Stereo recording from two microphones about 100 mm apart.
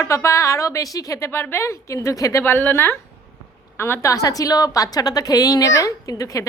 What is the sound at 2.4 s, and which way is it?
A woman's voice, 20° left (ahead or behind).